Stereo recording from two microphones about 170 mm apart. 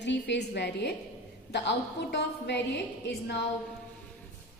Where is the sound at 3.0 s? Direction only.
75° left (ahead or behind).